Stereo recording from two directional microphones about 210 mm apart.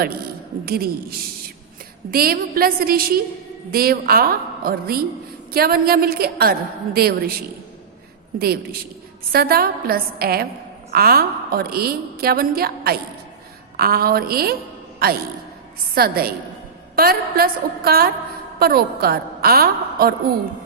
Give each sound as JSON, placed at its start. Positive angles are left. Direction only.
{"t": 0.6, "sound": "a woman's voice", "side_deg": -45}
{"t": 2.0, "sound": "a woman's voice", "side_deg": -45}
{"t": 8.4, "sound": "a woman's voice", "side_deg": -45}